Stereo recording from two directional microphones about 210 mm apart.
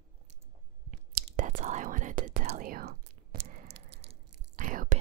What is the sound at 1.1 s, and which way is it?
Whispering, 40° right (ahead or behind).